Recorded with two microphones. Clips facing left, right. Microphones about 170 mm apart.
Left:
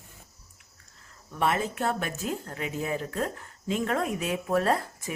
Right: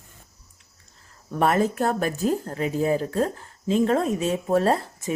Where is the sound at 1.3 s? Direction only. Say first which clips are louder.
Right 6 dB; 45° right (ahead or behind).